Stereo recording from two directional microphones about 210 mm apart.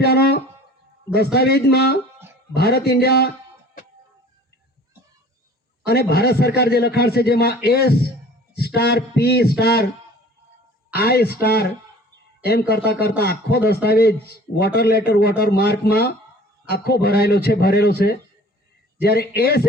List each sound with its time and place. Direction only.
0.0 s a man's voice: 50° left (ahead or behind)
5.8 s a man's voice: 50° left (ahead or behind)
10.9 s a man's voice: 45° left (ahead or behind)